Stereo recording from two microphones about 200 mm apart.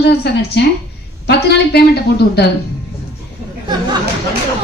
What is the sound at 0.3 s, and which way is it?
A woman's voice, 55° left (ahead or behind).